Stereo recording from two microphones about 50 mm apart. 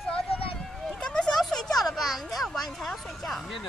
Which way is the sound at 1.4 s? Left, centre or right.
Centre.